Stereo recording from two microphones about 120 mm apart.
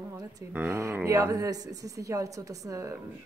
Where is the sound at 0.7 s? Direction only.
25° right (ahead or behind).